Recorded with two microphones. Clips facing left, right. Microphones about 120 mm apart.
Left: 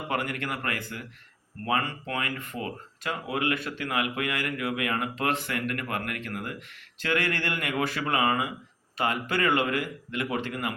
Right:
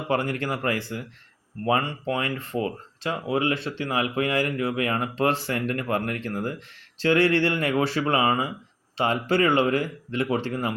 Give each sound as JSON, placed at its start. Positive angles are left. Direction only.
{"t": 0.1, "sound": "speech", "side_deg": -30}